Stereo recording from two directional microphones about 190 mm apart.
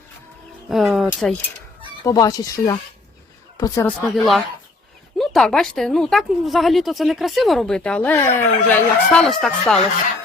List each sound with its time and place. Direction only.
0.7 s speech: centre (ahead or behind)
2.0 s speech: 20° left (ahead or behind)
4.0 s speech: centre (ahead or behind)